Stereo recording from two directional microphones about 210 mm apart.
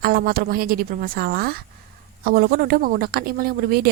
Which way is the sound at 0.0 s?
45° right (ahead or behind).